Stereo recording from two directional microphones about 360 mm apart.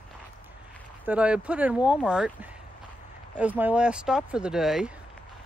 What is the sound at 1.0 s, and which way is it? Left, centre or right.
Speech, centre.